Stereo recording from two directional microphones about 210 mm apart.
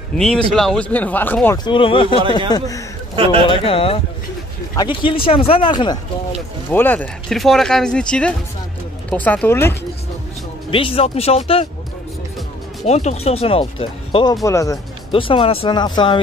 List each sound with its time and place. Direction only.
0.2 s speech: 5° left (ahead or behind)
1.6 s speech: 25° left (ahead or behind)
3.4 s speech: 25° left (ahead or behind)
6.7 s speech: 10° left (ahead or behind)
10.7 s speech: 25° left (ahead or behind)
12.8 s speech: 30° left (ahead or behind)